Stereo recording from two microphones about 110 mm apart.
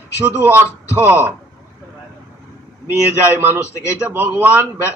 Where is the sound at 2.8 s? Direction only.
20° right (ahead or behind).